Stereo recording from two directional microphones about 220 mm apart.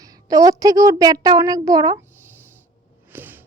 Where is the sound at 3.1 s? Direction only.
10° right (ahead or behind).